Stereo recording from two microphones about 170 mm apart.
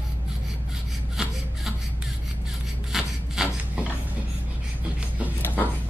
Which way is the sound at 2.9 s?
5° right (ahead or behind).